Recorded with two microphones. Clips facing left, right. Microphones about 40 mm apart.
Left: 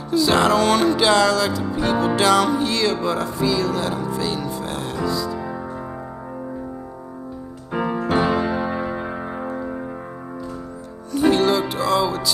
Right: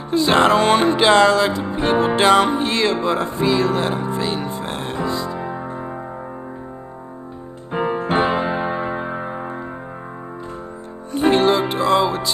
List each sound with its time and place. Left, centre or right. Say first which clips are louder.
0.1 s music: right 2 dB; right
7.7 s music: right 1 dB; right
11.1 s music: right 2 dB; right